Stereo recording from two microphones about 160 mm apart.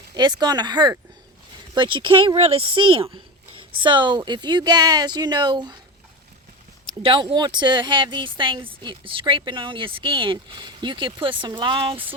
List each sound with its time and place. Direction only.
0.1 s speech: 25° right (ahead or behind)
7.0 s speech: 35° right (ahead or behind)